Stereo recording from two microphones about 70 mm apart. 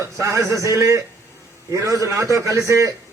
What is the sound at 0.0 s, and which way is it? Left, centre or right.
A man's voice, right.